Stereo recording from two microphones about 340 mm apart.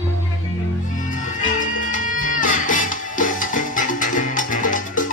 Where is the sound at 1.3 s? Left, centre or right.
Left.